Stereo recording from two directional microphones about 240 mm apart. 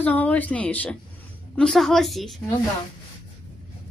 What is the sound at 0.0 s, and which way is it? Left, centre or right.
A woman's voice, centre.